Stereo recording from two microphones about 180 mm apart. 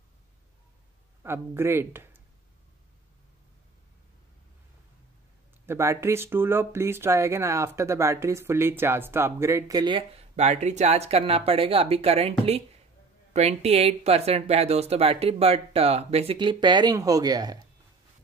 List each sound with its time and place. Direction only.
1.2 s speech: 15° right (ahead or behind)
5.7 s speech: 15° right (ahead or behind)